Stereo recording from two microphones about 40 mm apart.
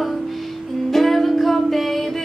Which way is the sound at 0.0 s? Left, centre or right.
Centre.